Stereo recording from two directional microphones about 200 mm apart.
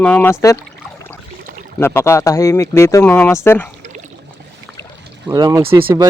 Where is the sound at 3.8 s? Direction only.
35° right (ahead or behind).